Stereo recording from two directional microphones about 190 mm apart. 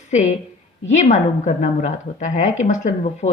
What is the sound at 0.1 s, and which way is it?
A woman's voice, 40° left (ahead or behind).